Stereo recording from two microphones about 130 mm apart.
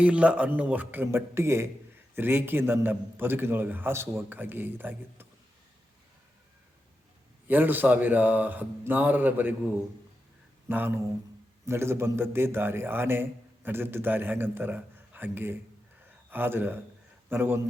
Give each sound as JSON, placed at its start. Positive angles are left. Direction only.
{"t": 0.0, "sound": "a man's voice", "side_deg": -10}
{"t": 7.4, "sound": "a man's voice", "side_deg": -15}
{"t": 10.7, "sound": "a man's voice", "side_deg": -15}